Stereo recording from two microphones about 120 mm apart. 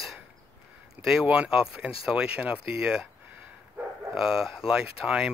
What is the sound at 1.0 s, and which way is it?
Speech, 5° right (ahead or behind).